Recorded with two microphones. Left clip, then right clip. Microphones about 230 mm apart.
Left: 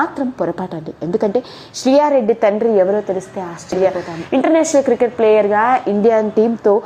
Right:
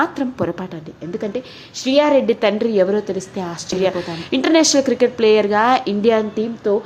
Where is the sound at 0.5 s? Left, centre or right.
Centre.